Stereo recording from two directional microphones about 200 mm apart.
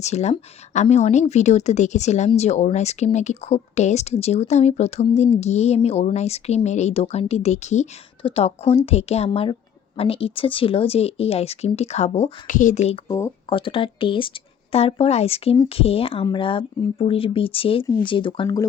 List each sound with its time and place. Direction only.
0.0 s a woman's voice: 35° left (ahead or behind)
13.1 s speech: 15° left (ahead or behind)
13.5 s speech: 25° left (ahead or behind)